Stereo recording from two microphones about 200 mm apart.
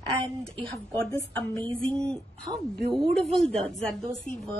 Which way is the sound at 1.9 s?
5° left (ahead or behind).